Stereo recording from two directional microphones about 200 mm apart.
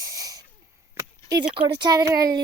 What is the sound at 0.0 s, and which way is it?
Wheeze, 15° right (ahead or behind).